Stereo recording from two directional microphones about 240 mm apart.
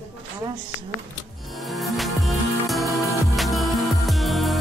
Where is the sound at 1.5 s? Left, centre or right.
Centre.